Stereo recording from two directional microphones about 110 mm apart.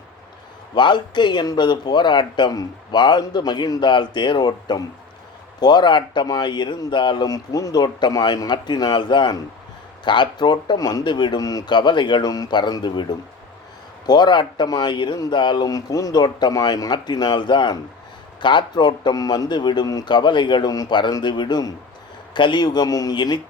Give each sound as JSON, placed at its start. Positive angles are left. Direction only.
{"t": 0.8, "sound": "speech", "side_deg": 45}